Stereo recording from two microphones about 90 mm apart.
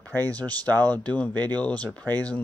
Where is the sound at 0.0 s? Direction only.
20° left (ahead or behind).